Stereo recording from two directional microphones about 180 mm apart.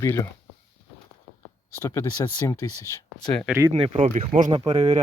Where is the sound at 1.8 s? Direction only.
15° left (ahead or behind).